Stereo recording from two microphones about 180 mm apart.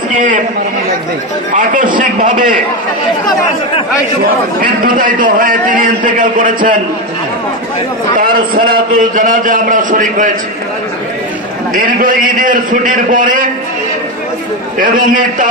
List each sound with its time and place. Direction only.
0.1 s a man's voice: 45° right (ahead or behind)
1.5 s a man's voice: 45° right (ahead or behind)
4.6 s a man's voice: 50° right (ahead or behind)
8.2 s a man's voice: 50° right (ahead or behind)
11.7 s a man's voice: 50° right (ahead or behind)
14.8 s a man's voice: 45° right (ahead or behind)